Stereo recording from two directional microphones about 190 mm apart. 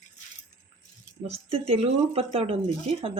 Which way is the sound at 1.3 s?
30° right (ahead or behind).